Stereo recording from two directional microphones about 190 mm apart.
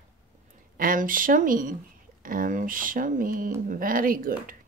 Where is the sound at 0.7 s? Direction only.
45° right (ahead or behind).